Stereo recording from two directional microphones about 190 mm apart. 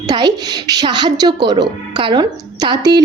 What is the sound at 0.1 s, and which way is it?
A woman's voice, 20° right (ahead or behind).